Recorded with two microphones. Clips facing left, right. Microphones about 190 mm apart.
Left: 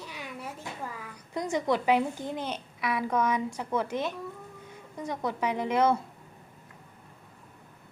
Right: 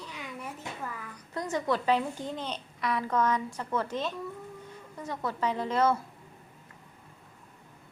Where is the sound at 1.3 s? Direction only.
15° left (ahead or behind).